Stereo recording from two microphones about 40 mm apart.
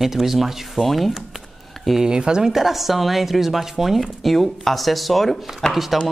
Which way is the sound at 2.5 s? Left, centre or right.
Centre.